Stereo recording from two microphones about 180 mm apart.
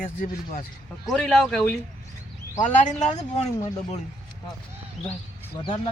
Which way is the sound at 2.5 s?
40° left (ahead or behind).